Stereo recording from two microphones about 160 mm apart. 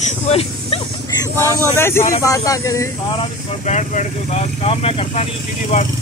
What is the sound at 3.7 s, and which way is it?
Speech, 45° left (ahead or behind).